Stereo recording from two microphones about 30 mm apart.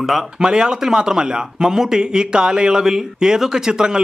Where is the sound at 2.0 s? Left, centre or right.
Right.